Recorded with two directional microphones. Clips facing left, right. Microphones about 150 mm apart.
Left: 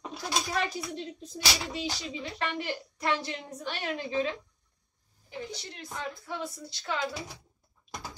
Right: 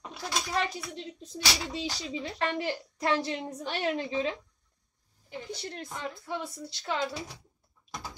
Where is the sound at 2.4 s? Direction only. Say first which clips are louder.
Right 3 dB; 35° right (ahead or behind).